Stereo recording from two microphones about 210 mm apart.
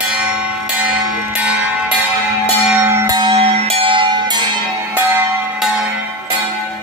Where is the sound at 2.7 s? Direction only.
10° right (ahead or behind).